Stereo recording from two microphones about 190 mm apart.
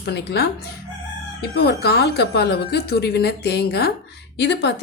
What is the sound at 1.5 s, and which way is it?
Speech, 60° left (ahead or behind).